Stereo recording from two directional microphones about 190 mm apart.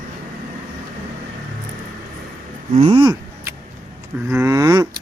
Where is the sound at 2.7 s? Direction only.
30° right (ahead or behind).